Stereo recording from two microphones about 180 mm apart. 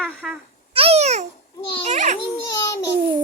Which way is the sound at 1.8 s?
40° right (ahead or behind).